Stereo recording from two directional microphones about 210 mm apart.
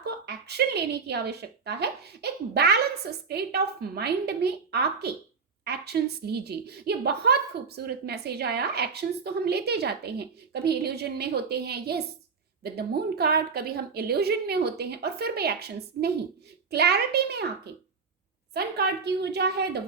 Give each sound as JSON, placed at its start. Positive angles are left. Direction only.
{"t": 0.0, "sound": "a woman's voice", "side_deg": -50}
{"t": 18.5, "sound": "a woman's voice", "side_deg": -50}